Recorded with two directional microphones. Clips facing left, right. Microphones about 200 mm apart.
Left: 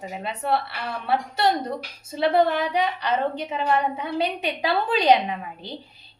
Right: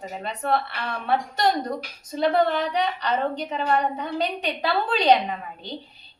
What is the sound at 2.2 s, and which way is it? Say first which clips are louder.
A woman's voice: left 1 dB; 5° left (ahead or behind).